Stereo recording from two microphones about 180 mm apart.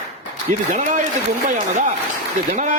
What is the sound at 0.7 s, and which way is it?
A man's voice, 45° right (ahead or behind).